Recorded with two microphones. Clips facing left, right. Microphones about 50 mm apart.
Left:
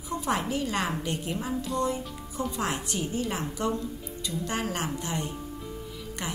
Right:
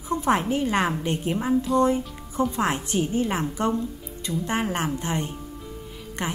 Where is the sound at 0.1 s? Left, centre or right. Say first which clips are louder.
Right 6 dB; right.